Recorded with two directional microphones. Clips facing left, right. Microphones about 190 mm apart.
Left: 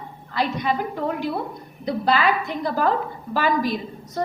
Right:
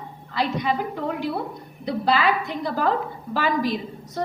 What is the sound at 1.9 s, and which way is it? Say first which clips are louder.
A woman's voice: left 1 dB; 45° left (ahead or behind).